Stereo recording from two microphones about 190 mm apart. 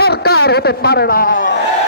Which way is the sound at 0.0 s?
55° left (ahead or behind).